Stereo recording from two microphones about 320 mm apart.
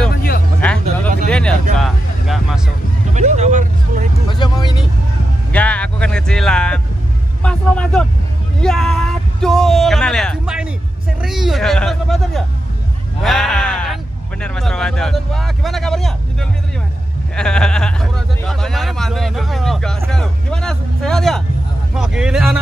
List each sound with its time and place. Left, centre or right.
0.1 s music: left
0.6 s a sound: centre
3.2 s vehicle: right
4.3 s vehicle: centre
5.5 s music: centre
7.4 s vehicle: centre
8.5 s a sound: centre
13.2 s sheep: centre
14.4 s a sound: centre
21.9 s vehicle: centre